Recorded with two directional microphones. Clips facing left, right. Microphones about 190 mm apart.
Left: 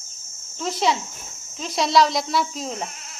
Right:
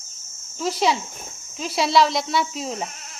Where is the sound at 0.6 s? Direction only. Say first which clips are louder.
Right 1 dB; 5° right (ahead or behind).